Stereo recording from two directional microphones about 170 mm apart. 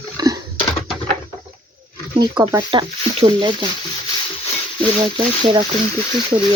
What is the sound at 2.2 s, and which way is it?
Speech, 25° right (ahead or behind).